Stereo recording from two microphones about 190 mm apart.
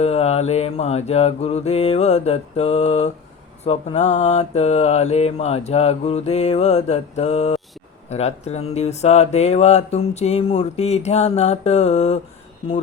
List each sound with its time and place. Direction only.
0.0 s speech: 35° left (ahead or behind)